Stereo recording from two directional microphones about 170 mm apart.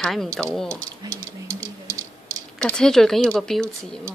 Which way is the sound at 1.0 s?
20° right (ahead or behind).